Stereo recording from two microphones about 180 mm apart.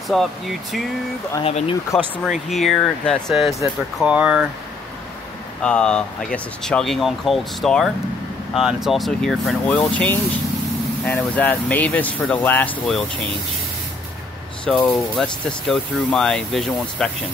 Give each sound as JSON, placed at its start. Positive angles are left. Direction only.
{"t": 0.1, "sound": "speech", "side_deg": 0}
{"t": 1.4, "sound": "speech", "side_deg": 30}
{"t": 2.5, "sound": "speech", "side_deg": 0}
{"t": 5.6, "sound": "speech", "side_deg": 5}
{"t": 14.6, "sound": "speech", "side_deg": 5}